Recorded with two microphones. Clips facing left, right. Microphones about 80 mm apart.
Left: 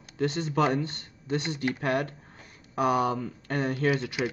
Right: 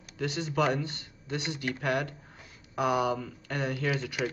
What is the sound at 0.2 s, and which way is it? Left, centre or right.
Speech, left.